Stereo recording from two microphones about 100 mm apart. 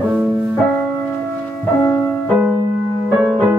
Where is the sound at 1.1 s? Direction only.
15° left (ahead or behind).